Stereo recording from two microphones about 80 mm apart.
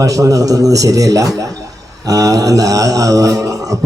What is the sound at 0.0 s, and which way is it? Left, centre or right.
Mantra, right.